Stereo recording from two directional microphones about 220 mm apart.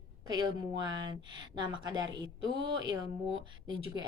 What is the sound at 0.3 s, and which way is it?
A woman's voice, 20° right (ahead or behind).